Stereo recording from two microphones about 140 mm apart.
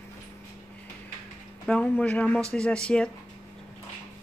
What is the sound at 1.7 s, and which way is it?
Speech, 10° left (ahead or behind).